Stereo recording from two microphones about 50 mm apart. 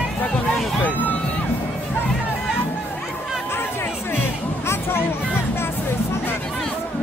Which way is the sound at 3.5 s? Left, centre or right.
Left.